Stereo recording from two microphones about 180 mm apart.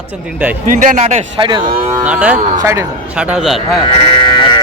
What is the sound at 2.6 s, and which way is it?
Speech, 15° right (ahead or behind).